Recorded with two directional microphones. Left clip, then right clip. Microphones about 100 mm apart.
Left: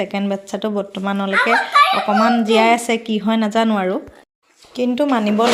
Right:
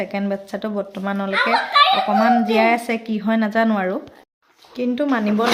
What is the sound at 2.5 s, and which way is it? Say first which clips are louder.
Speech: left 3 dB; 30° left (ahead or behind).